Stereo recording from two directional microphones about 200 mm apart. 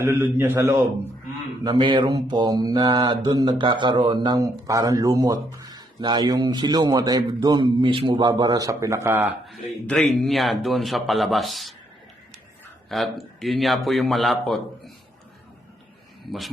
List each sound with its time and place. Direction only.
0.0 s a man's voice: 15° right (ahead or behind)
1.6 s mantra: 25° right (ahead or behind)
9.5 s a man's voice: 5° left (ahead or behind)
12.9 s a man's voice: centre (ahead or behind)